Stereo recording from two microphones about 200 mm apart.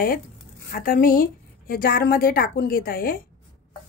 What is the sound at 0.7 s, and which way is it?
A woman's voice, 45° left (ahead or behind).